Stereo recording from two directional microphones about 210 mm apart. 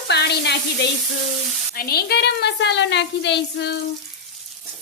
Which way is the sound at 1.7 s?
45° left (ahead or behind).